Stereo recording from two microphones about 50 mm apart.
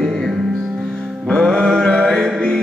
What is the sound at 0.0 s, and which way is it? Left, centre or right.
Music, centre.